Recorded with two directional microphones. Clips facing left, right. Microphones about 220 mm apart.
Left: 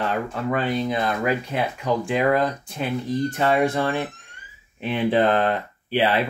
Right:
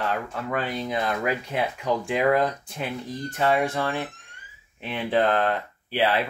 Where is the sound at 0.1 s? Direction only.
5° right (ahead or behind).